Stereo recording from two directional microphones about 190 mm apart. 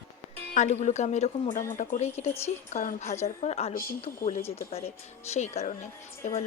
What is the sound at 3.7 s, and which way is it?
Speech, 50° left (ahead or behind).